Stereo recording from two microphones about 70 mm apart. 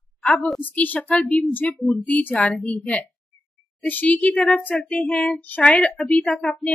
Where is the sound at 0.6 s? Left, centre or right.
Left.